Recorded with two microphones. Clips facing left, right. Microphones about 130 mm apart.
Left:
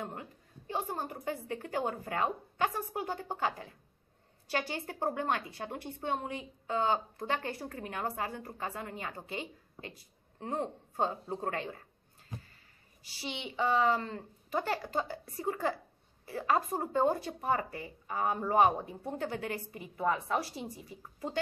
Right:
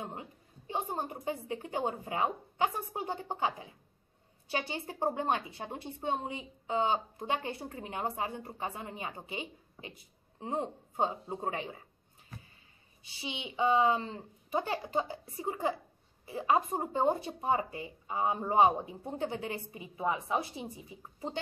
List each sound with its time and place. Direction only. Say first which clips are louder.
0.0 s a woman's voice: left 1 dB; 20° right (ahead or behind)
12.3 s a sound: left 4 dB; 15° left (ahead or behind)
13.0 s a woman's voice: left 1 dB; 20° right (ahead or behind)